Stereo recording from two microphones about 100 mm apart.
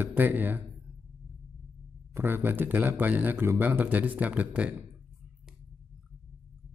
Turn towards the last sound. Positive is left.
turn(degrees=-15)  # may be behind; listen again after turning